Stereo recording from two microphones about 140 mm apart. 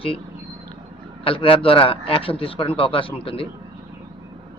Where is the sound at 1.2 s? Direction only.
40° left (ahead or behind).